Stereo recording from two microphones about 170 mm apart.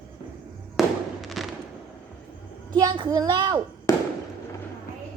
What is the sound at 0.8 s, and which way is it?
Fireworks, centre (ahead or behind).